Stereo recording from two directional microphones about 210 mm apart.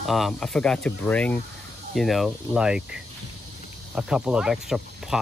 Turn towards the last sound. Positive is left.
turn(degrees=0)  # may be behind; listen again after turning